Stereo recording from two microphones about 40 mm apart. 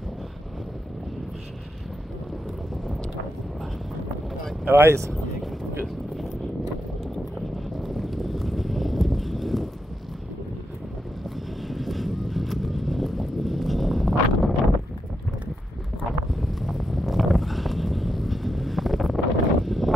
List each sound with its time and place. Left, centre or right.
4.6 s speech: right
7.5 s a sound: centre
11.6 s vehicle: centre
16.3 s vehicle: centre